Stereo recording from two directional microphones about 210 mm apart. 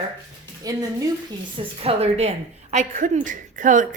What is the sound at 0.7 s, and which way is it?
Speech, 15° right (ahead or behind).